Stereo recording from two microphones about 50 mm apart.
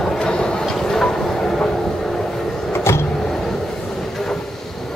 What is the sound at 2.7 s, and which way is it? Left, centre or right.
Vehicle, left.